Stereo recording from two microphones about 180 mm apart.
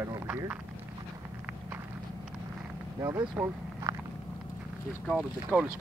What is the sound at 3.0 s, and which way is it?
Speech, 15° right (ahead or behind).